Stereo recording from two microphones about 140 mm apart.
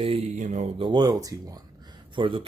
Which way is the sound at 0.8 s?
30° right (ahead or behind).